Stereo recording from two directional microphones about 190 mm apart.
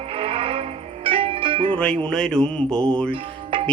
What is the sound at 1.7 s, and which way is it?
Music, 5° left (ahead or behind).